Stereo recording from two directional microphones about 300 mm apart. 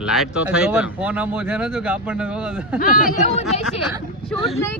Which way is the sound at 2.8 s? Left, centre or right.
Left.